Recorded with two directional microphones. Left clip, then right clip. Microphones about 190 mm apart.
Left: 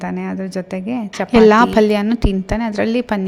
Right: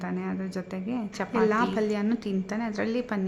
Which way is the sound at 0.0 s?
35° left (ahead or behind).